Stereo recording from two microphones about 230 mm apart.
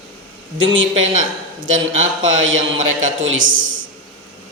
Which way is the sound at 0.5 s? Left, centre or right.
Right.